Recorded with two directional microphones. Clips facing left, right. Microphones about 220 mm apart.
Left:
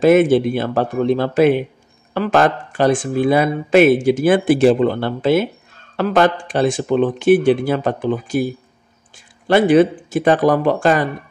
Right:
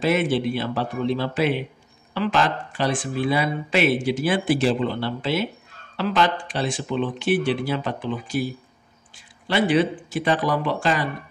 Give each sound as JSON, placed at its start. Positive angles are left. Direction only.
{"t": 0.0, "sound": "speech", "side_deg": 50}